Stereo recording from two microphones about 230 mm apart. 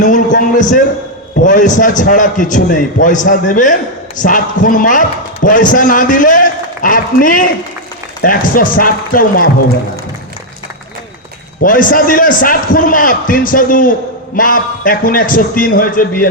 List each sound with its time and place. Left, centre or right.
0.0 s a sound: left
1.5 s a man's voice: left
11.6 s a man's voice: left